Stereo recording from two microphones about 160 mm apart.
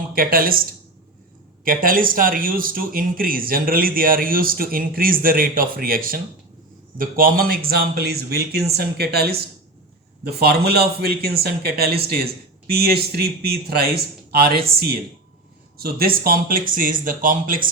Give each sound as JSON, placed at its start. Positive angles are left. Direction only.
{"t": 0.1, "sound": "speech", "side_deg": -65}
{"t": 15.8, "sound": "speech", "side_deg": -70}